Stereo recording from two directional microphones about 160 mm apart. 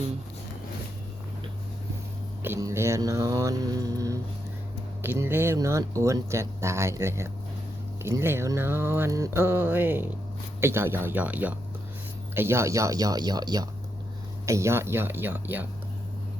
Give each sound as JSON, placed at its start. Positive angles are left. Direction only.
{"t": 2.4, "sound": "speech", "side_deg": -15}